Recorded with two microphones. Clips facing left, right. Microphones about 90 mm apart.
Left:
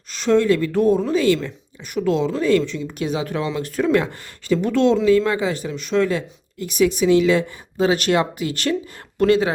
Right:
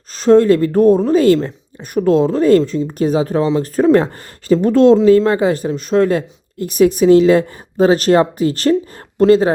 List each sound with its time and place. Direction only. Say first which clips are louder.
0.1 s speech: right 7 dB; 40° right (ahead or behind)